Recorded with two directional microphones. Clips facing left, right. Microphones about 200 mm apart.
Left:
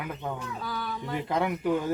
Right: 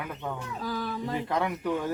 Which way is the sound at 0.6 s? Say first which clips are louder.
Right 3 dB; 35° right (ahead or behind).